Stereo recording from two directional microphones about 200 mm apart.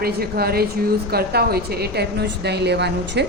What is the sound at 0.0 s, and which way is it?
A woman's voice, 50° right (ahead or behind).